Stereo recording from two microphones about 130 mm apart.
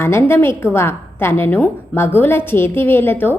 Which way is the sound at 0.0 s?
20° left (ahead or behind).